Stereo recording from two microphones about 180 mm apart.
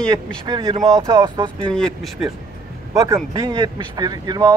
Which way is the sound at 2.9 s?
15° right (ahead or behind).